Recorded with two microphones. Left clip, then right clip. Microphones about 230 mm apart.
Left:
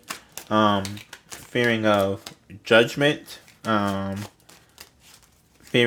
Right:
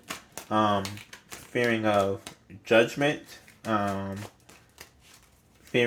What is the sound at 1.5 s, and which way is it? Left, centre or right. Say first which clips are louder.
Speech: left 4 dB; left.